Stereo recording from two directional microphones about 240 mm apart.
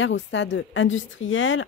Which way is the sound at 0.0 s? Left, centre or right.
Left.